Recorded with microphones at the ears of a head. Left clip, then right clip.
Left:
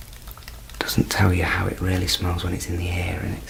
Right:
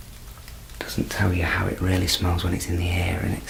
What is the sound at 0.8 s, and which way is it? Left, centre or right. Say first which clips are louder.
Whispering: left 5 dB; left.